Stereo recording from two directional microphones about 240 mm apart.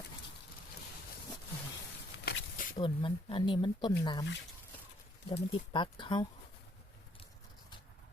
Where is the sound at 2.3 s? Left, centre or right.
Left.